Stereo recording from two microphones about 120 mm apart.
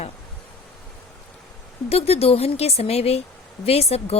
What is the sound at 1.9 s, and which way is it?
Speech, 60° left (ahead or behind).